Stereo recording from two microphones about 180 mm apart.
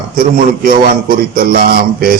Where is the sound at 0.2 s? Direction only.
55° right (ahead or behind).